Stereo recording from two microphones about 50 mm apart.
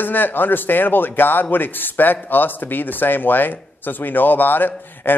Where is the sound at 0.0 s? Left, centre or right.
Left.